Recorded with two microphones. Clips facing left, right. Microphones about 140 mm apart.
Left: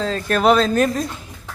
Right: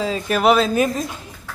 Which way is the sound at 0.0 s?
10° right (ahead or behind).